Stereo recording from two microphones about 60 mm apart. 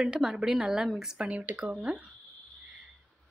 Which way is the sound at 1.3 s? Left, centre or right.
Right.